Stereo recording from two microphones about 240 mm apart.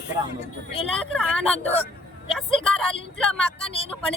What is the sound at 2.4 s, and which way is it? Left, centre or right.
Vehicle, centre.